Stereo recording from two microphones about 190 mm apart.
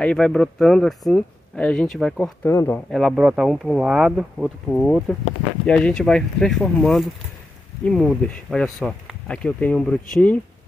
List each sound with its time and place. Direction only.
0.0 s speech: 5° left (ahead or behind)
2.4 s speech: 15° left (ahead or behind)
2.9 s speech: centre (ahead or behind)